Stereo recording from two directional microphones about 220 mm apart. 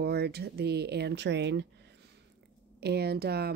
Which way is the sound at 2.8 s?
45° right (ahead or behind).